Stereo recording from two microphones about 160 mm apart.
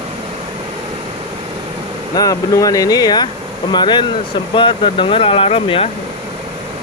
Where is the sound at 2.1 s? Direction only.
25° left (ahead or behind).